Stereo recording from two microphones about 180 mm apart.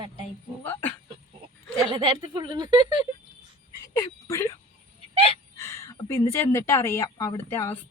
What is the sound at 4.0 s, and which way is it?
Speech, 15° left (ahead or behind).